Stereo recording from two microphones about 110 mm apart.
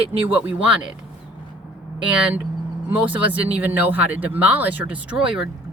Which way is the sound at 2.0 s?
10° right (ahead or behind).